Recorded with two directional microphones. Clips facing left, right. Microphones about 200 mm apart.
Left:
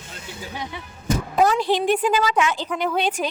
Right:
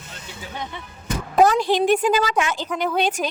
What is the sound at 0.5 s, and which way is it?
Speech, 10° left (ahead or behind).